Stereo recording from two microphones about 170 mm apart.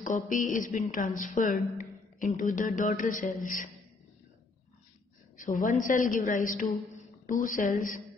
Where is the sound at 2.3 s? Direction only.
50° left (ahead or behind).